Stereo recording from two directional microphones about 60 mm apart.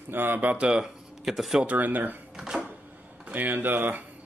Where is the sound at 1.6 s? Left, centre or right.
Right.